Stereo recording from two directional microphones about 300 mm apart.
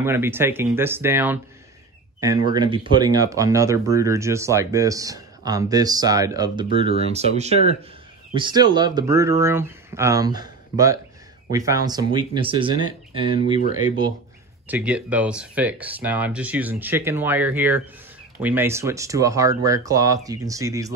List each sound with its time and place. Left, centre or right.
0.0 s speech: centre
14.7 s speech: centre